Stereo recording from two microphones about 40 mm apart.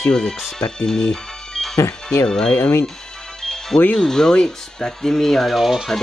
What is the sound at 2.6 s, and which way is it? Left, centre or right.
Speech, left.